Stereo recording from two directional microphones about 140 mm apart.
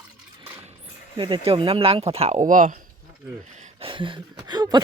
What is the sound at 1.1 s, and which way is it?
Speech, 40° right (ahead or behind).